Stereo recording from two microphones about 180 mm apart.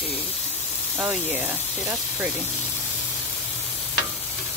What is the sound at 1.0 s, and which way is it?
Speech, 10° right (ahead or behind).